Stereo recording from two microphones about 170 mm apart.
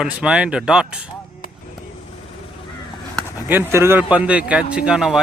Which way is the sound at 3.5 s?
15° right (ahead or behind).